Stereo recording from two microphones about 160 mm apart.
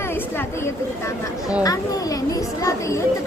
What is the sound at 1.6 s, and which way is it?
A child's voice, 20° left (ahead or behind).